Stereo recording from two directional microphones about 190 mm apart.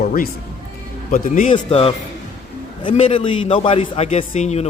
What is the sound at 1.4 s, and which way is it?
A man's voice, 30° left (ahead or behind).